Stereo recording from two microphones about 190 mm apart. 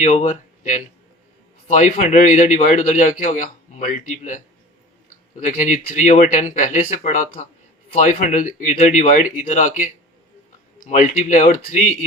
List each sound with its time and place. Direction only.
0.0 s speech: 40° left (ahead or behind)
5.5 s speech: 40° left (ahead or behind)